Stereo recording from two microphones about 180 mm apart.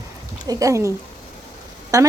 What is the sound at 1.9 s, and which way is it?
Speech, 20° right (ahead or behind).